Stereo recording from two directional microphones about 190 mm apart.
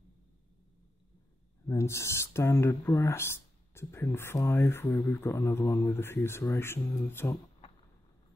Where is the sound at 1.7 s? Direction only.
15° left (ahead or behind).